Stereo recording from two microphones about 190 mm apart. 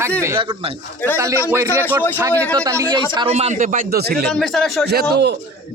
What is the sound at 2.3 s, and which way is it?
Speech, 10° left (ahead or behind).